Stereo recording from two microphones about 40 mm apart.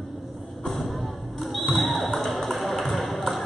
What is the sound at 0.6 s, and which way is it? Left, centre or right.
Music, centre.